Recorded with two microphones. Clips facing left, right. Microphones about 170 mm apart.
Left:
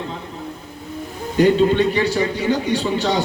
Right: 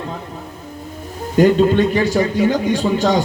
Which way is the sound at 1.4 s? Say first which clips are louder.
Right 2 dB; 45° right (ahead or behind).